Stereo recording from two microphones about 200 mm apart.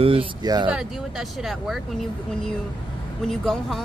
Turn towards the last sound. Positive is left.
turn(degrees=0)  # may be behind; listen again after turning